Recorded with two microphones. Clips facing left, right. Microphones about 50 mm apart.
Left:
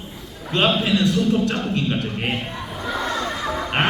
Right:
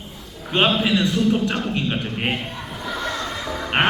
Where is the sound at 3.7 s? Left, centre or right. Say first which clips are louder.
Right 2 dB; right.